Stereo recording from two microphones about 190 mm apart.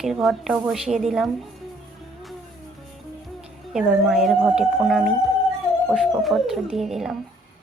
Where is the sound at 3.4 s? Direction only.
5° right (ahead or behind).